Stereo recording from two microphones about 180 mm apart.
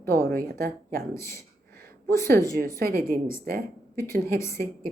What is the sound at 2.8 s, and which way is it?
Speech, 55° right (ahead or behind).